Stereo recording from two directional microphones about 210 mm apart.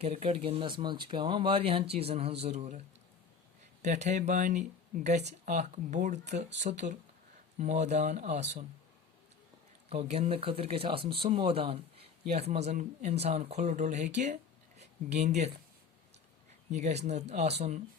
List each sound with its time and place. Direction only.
0.0 s speech: 30° right (ahead or behind)
3.8 s speech: 35° right (ahead or behind)
9.9 s speech: 30° right (ahead or behind)
16.7 s speech: 35° right (ahead or behind)